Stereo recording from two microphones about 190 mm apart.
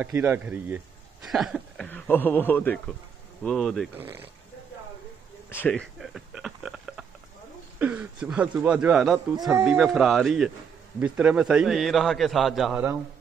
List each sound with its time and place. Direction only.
0.0 s speech: 10° right (ahead or behind)
1.9 s a man's voice: 10° left (ahead or behind)
3.9 s speech: 10° right (ahead or behind)
5.5 s speech: 10° left (ahead or behind)
9.3 s speech: 20° right (ahead or behind)
9.7 s a man's voice: 5° right (ahead or behind)